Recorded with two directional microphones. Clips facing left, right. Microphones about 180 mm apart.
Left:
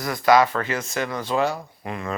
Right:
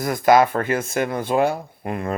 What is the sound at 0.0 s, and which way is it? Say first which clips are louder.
Speech: right 2 dB; 50° right (ahead or behind).